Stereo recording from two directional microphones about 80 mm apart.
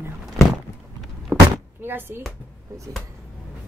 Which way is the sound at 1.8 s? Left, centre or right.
Right.